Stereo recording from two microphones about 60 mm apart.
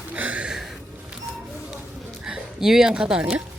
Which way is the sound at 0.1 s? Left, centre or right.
Right.